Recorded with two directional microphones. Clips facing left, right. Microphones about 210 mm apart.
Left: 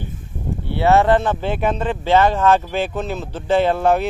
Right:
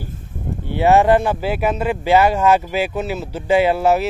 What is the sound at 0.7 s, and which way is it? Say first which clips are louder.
Speech: right 1 dB; 15° right (ahead or behind).